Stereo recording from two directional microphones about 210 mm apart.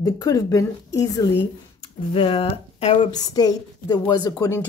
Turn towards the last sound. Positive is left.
turn(degrees=15)  # may be behind; listen again after turning